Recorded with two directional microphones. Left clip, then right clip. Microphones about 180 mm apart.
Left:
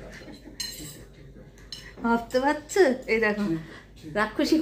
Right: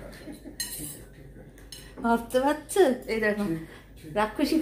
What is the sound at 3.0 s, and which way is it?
A woman's voice, 25° left (ahead or behind).